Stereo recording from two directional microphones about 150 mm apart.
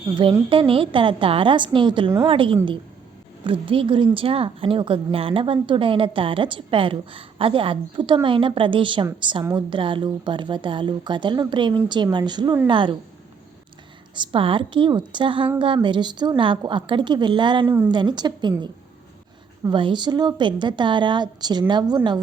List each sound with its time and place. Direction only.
0.1 s a woman's voice: 30° right (ahead or behind)
14.2 s a woman's voice: 35° right (ahead or behind)
19.7 s a woman's voice: 30° right (ahead or behind)